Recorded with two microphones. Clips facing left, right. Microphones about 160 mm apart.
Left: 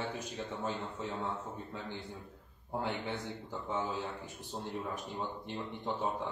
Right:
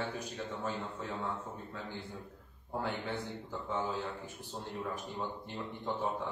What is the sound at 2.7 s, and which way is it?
Speech, 20° left (ahead or behind).